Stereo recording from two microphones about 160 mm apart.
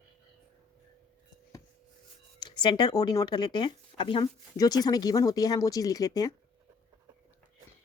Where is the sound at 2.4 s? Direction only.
30° left (ahead or behind).